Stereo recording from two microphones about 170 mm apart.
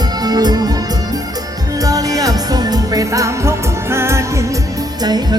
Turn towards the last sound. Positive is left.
turn(degrees=-25)  # may be behind; listen again after turning